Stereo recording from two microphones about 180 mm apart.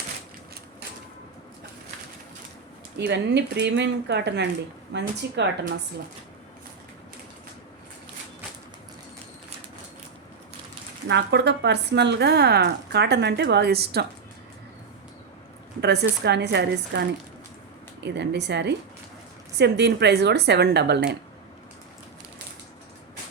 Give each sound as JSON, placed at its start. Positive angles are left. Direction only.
{"t": 3.0, "sound": "speech", "side_deg": -65}
{"t": 11.1, "sound": "speech", "side_deg": -70}
{"t": 15.8, "sound": "speech", "side_deg": -70}